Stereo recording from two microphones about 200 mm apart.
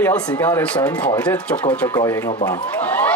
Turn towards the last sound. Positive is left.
turn(degrees=5)  # may be behind; listen again after turning